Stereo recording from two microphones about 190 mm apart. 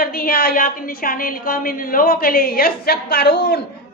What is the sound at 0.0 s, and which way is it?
A woman's voice, 50° left (ahead or behind).